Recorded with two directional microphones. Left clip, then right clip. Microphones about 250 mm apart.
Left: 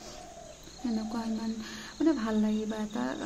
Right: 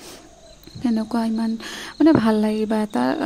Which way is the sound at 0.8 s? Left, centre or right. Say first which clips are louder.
Right 11 dB; right.